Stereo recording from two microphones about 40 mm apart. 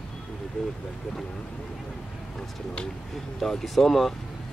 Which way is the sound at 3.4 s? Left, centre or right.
Centre.